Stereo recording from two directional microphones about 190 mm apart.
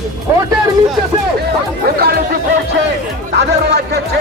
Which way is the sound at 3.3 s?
60° right (ahead or behind).